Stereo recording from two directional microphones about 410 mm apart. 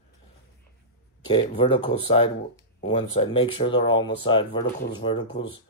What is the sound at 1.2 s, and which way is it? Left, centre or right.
Speech, centre.